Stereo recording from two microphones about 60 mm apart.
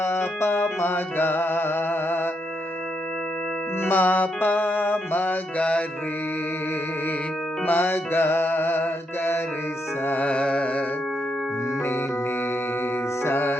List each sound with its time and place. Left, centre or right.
0.0 s music: left
3.8 s music: left
5.5 s mantra: left
7.7 s music: left
10.1 s carnatic music: left
13.2 s music: left